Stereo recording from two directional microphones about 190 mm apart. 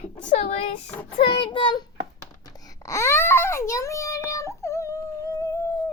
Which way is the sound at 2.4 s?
20° left (ahead or behind).